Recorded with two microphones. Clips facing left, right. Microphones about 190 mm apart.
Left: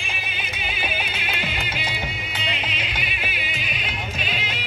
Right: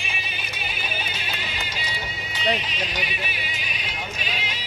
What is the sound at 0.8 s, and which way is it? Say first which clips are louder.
Music: left 4 dB; 55° left (ahead or behind).